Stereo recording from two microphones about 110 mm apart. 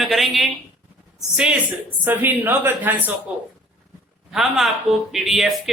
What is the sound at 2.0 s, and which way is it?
Speech, 20° right (ahead or behind).